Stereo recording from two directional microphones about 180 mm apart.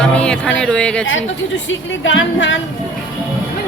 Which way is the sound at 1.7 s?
90° left.